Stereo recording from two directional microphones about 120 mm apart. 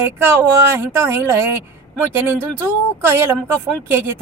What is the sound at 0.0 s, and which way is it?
Speech, 15° right (ahead or behind).